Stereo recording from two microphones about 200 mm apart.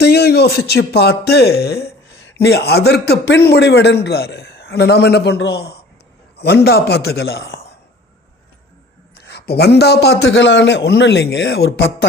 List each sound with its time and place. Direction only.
0.0 s a sound: 55° left (ahead or behind)
0.7 s a man's voice: 55° left (ahead or behind)
9.1 s a man's voice: 55° left (ahead or behind)